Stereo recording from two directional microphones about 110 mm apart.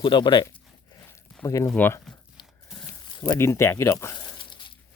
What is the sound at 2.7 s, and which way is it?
Speech, 30° left (ahead or behind).